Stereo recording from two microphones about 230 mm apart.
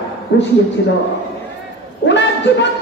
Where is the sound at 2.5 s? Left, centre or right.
Left.